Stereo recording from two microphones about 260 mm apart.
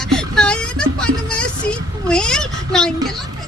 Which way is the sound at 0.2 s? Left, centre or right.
Centre.